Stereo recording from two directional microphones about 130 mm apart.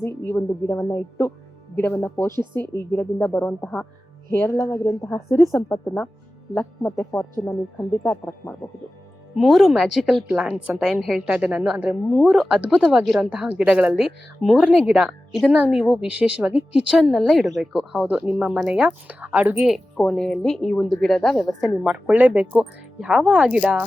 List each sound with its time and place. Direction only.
0.0 s a woman's voice: 15° left (ahead or behind)
2.3 s speech: 35° right (ahead or behind)
2.6 s a woman's voice: 15° left (ahead or behind)
4.3 s a woman's voice: 20° left (ahead or behind)
9.3 s a woman's voice: centre (ahead or behind)
21.8 s speech: 10° right (ahead or behind)